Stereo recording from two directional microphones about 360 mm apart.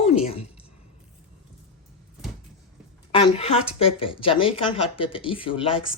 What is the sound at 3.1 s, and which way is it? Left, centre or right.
A woman's voice, centre.